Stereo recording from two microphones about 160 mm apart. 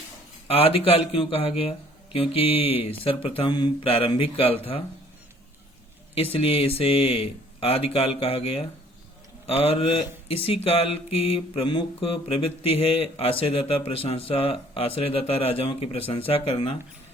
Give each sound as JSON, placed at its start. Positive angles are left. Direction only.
{"t": 0.4, "sound": "mantra", "side_deg": 35}
{"t": 6.3, "sound": "mantra", "side_deg": 35}